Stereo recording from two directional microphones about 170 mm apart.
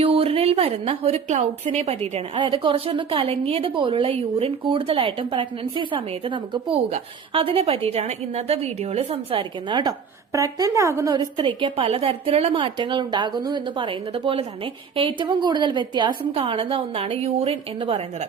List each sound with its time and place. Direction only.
0.0 s a woman's voice: 35° right (ahead or behind)